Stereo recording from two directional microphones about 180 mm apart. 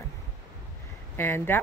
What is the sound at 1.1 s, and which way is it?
Speech, 10° left (ahead or behind).